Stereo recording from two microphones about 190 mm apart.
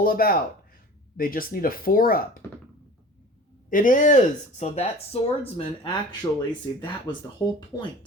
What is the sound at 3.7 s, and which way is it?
Speech, 45° left (ahead or behind).